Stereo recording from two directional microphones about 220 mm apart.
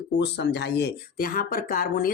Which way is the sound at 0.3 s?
50° left (ahead or behind).